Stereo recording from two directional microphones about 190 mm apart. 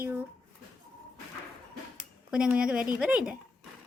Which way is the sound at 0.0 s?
10° right (ahead or behind).